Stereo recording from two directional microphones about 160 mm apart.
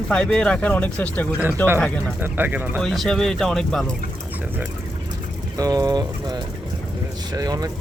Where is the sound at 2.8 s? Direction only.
Centre (ahead or behind).